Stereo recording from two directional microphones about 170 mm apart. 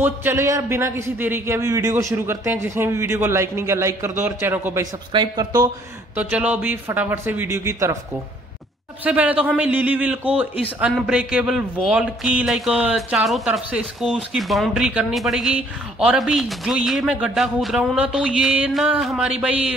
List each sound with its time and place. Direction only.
0.0 s a man's voice: 10° right (ahead or behind)
5.1 s speech: 25° right (ahead or behind)
6.1 s a man's voice: 10° right (ahead or behind)
9.0 s a man's voice: 10° right (ahead or behind)